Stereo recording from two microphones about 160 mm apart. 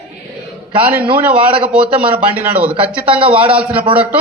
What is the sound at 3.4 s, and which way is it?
Speech, 10° right (ahead or behind).